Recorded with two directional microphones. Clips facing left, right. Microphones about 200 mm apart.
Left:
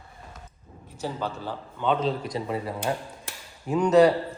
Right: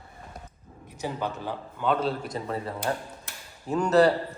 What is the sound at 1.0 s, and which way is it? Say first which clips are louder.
A man's voice: even; 15° right (ahead or behind).